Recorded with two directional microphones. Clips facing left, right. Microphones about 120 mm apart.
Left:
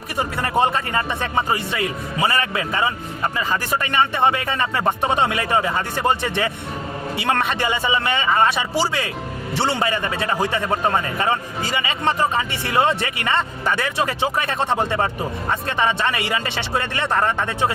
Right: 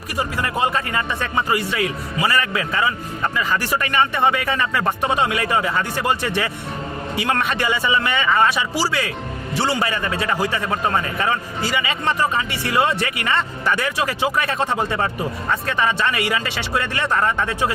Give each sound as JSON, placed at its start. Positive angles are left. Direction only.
{"t": 0.2, "sound": "a man's voice", "side_deg": 30}